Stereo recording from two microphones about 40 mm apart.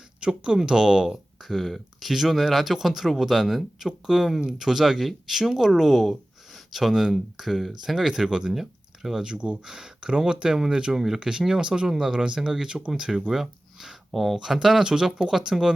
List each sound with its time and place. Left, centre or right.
0.3 s speech: right
1.0 s speech: centre; by 9.6 s right
9.6 s speech: centre
10.9 s speech: centre
12.6 s speech: right
13.3 s speech: centre